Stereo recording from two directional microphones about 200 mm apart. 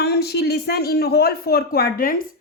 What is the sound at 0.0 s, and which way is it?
Speech, 55° left (ahead or behind).